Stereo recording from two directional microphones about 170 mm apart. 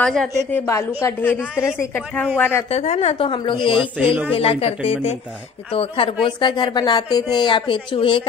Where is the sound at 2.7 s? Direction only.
40° left (ahead or behind).